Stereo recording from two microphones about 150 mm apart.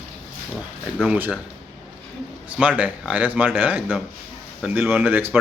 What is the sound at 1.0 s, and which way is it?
Speech, 10° right (ahead or behind).